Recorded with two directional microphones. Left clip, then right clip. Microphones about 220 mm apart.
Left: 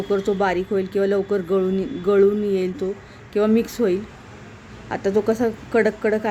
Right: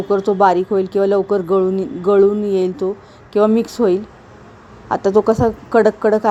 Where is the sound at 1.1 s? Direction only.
5° left (ahead or behind).